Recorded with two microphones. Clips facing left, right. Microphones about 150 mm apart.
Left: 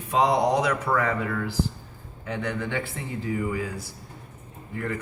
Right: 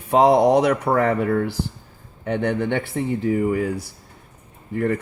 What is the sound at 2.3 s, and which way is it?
Speech, 60° right (ahead or behind).